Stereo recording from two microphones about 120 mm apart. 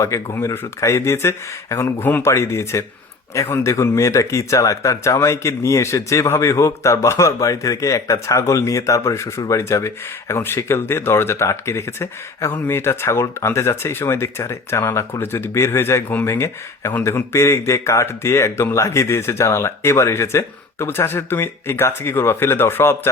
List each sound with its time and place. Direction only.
0.0 s speech: 20° left (ahead or behind)